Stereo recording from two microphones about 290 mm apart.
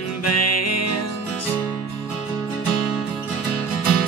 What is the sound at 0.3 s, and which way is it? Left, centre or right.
Music, left.